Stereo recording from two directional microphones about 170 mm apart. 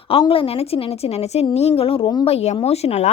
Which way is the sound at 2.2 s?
40° left (ahead or behind).